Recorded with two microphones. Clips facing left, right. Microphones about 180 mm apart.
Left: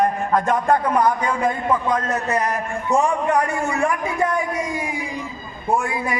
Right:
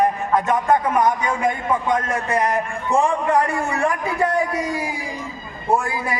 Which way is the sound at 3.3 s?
35° right (ahead or behind).